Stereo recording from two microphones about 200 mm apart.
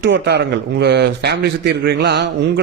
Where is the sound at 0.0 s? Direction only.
60° right (ahead or behind).